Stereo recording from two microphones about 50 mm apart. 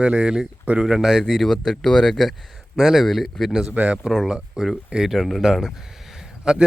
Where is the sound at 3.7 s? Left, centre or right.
Right.